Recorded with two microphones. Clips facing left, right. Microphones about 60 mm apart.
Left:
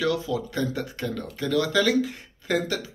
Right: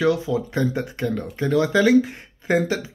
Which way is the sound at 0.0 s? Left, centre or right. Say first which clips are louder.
Right 5 dB; right.